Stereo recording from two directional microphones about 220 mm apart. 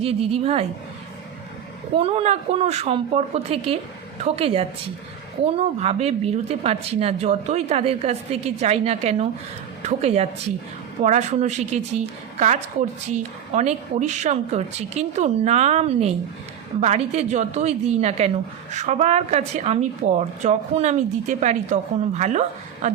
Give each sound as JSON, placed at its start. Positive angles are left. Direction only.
{"t": 0.0, "sound": "a woman's voice", "side_deg": -25}
{"t": 2.0, "sound": "a woman's voice", "side_deg": -25}